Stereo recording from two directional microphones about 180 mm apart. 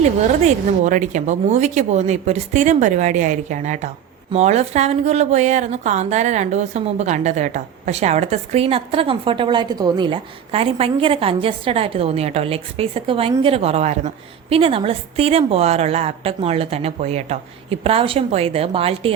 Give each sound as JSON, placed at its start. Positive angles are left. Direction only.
{"t": 0.0, "sound": "a woman's voice", "side_deg": -40}